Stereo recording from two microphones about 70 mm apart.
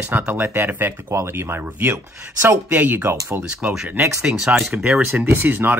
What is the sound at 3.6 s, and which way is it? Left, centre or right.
Speech, centre.